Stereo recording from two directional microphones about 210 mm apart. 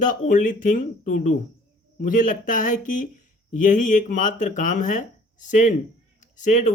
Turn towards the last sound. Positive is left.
turn(degrees=35)  # may be behind; listen again after turning